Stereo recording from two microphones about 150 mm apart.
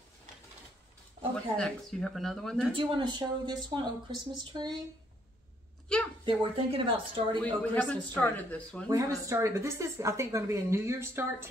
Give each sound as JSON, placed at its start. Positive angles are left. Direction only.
{"t": 1.3, "sound": "speech", "side_deg": 5}
{"t": 2.7, "sound": "a woman's voice", "side_deg": -30}
{"t": 5.9, "sound": "a sound", "side_deg": 5}
{"t": 6.2, "sound": "speech", "side_deg": -35}
{"t": 7.4, "sound": "speech", "side_deg": 10}
{"t": 8.9, "sound": "a woman's voice", "side_deg": -20}